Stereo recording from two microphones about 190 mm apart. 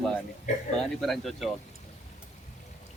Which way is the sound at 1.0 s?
Centre (ahead or behind).